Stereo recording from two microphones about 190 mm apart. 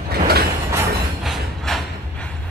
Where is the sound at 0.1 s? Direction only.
55° right (ahead or behind).